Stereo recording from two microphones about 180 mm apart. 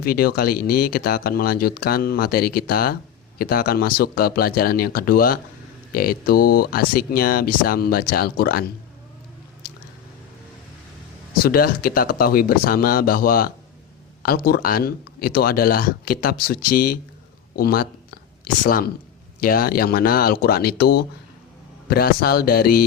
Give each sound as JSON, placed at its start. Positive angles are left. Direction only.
{"t": 0.0, "sound": "speech", "side_deg": 55}
{"t": 9.6, "sound": "squish", "side_deg": 55}
{"t": 11.4, "sound": "speech", "side_deg": 55}